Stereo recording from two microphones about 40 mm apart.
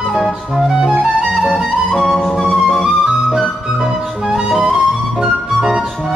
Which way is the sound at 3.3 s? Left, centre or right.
Centre.